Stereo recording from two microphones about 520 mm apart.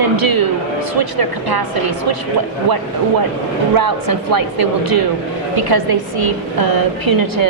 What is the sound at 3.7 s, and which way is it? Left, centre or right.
A woman's voice, right.